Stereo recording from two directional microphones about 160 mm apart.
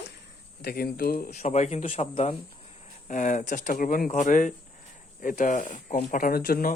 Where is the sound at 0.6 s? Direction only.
75° left (ahead or behind).